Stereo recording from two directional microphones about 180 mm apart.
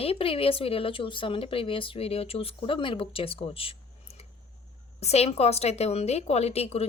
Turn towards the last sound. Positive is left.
turn(degrees=35)  # may be behind; listen again after turning